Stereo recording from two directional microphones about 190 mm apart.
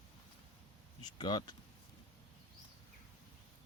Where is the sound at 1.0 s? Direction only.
25° left (ahead or behind).